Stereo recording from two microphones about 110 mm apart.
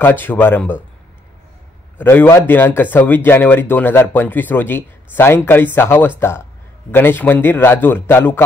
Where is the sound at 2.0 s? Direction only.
20° left (ahead or behind).